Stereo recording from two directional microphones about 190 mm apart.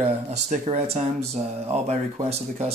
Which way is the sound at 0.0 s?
35° right (ahead or behind).